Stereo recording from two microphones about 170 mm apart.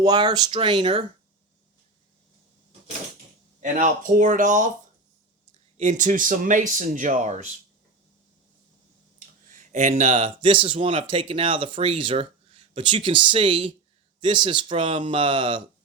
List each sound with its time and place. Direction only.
0.0 s speech: 25° right (ahead or behind)
3.6 s speech: 45° right (ahead or behind)
5.7 s speech: 40° right (ahead or behind)
9.1 s speech: 45° right (ahead or behind); by 15.6 s 30° right (ahead or behind)